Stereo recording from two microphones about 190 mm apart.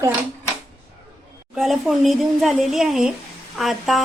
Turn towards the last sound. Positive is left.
turn(degrees=0)  # may be behind; listen again after turning